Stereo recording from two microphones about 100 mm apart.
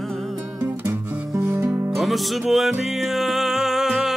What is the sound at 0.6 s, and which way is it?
Music, 25° right (ahead or behind).